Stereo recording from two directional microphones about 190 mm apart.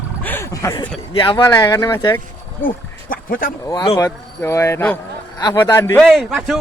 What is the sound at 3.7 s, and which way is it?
Speech, 20° left (ahead or behind).